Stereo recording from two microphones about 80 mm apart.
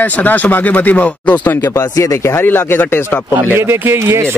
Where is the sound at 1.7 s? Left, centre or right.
Left.